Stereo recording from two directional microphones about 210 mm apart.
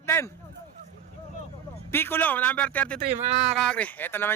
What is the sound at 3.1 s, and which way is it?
Speech, 30° right (ahead or behind).